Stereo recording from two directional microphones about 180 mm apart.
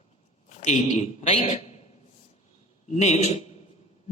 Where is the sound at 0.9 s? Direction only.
40° left (ahead or behind).